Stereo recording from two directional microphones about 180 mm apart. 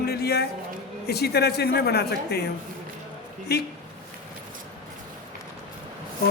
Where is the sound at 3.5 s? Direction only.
60° left (ahead or behind).